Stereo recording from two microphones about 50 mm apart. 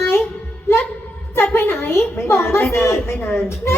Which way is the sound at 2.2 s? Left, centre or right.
Left.